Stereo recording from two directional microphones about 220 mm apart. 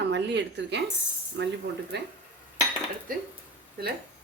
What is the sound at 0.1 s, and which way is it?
Speech, 55° right (ahead or behind).